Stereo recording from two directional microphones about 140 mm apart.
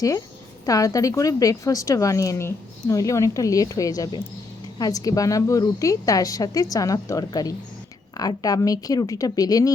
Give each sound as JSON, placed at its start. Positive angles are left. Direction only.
{"t": 0.6, "sound": "a woman's voice", "side_deg": 25}